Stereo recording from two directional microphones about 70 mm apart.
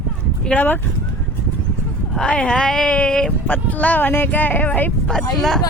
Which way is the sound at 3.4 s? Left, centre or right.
Left.